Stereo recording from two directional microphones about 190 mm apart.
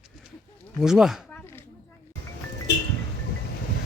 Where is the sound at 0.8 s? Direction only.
5° right (ahead or behind).